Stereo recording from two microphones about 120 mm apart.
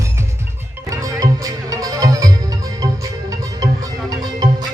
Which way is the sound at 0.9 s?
30° right (ahead or behind).